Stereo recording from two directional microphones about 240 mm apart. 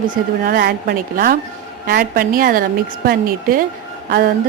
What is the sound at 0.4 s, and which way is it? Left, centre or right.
A woman's voice, right.